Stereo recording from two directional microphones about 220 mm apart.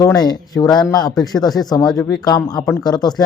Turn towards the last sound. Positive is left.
turn(degrees=20)  # may be behind; listen again after turning